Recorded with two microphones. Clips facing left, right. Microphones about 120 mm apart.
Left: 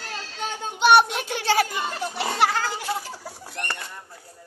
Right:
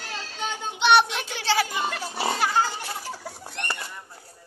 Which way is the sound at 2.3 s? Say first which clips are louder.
Left 3 dB; 85° left.